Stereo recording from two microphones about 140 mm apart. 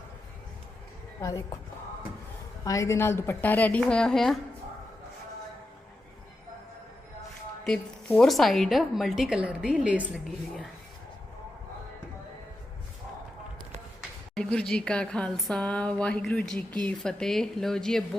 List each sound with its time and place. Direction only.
1.2 s a woman's voice: 25° left (ahead or behind)
2.6 s speech: 20° left (ahead or behind); by 4.4 s 5° left (ahead or behind)
7.6 s a woman's voice: centre (ahead or behind)
14.3 s a woman's voice: 5° left (ahead or behind)